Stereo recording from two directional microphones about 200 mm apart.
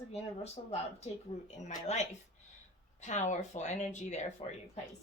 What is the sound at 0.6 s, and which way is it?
Speech, 30° left (ahead or behind).